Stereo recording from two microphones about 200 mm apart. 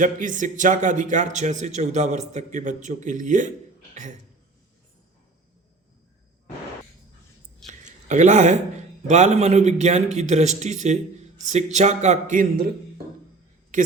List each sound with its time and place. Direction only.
0.0 s a man's voice: 40° right (ahead or behind)
7.7 s a man's voice: 35° right (ahead or behind)
13.7 s a woman's voice: 40° right (ahead or behind)